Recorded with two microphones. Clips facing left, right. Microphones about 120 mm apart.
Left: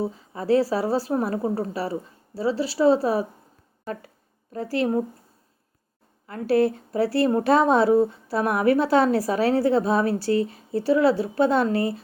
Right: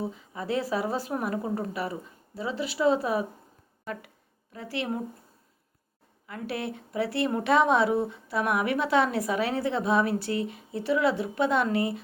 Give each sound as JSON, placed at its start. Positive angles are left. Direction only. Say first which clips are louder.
{"t": 0.0, "sound": "a woman's voice", "louder": "left 5 dB", "side_deg": 35}
{"t": 4.5, "sound": "a woman's voice", "louder": "left 8 dB", "side_deg": 40}
{"t": 6.2, "sound": "a woman's voice", "louder": "left 12 dB", "side_deg": 35}